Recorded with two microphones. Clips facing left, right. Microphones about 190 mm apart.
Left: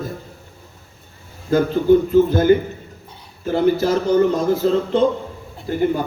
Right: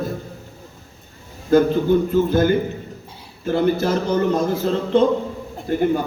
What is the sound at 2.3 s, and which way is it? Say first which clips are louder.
Speech: left 3 dB; 50° right (ahead or behind).